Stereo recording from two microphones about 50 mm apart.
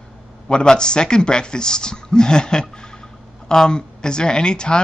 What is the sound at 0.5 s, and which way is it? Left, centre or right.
Speech, centre.